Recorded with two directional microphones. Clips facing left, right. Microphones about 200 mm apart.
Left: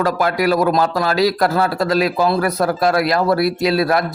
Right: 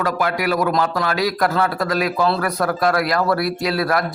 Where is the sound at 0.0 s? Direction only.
35° left (ahead or behind).